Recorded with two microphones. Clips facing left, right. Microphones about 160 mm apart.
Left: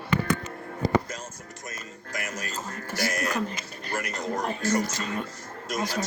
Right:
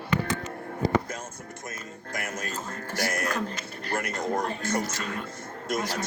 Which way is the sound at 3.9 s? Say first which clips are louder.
Right 2 dB; 50° right (ahead or behind).